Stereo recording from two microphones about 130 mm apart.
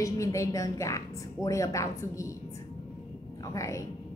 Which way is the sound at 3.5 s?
25° left (ahead or behind).